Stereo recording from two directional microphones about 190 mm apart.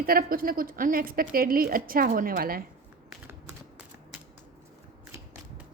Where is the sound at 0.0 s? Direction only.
50° right (ahead or behind).